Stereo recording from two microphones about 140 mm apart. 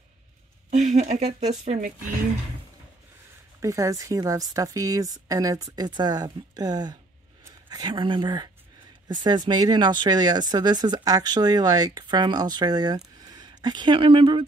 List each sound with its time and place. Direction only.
0.7 s speech: 55° right (ahead or behind)
3.6 s speech: 25° right (ahead or behind)